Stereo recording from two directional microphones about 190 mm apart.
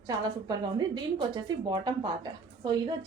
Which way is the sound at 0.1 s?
20° right (ahead or behind).